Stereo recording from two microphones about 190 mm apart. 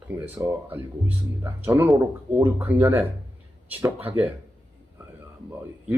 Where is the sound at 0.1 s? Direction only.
10° right (ahead or behind).